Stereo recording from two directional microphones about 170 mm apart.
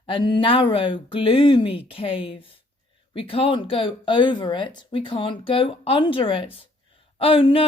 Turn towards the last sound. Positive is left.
turn(degrees=30)  # may be behind; listen again after turning